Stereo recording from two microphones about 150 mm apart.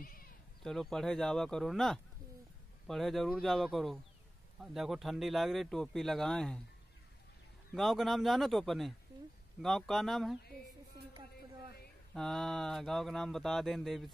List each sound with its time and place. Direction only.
0.0 s sheep: 75° left (ahead or behind)
0.6 s speech: centre (ahead or behind)
7.7 s speech: centre (ahead or behind)
12.1 s speech: centre (ahead or behind)